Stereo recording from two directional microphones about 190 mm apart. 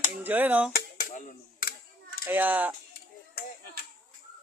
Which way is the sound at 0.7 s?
50° left (ahead or behind).